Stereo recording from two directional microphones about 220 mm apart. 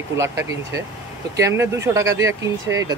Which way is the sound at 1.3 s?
15° right (ahead or behind).